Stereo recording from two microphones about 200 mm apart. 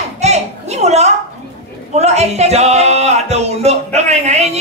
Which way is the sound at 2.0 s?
35° right (ahead or behind).